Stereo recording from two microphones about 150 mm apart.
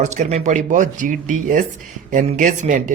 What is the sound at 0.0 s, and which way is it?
Speech, 50° right (ahead or behind).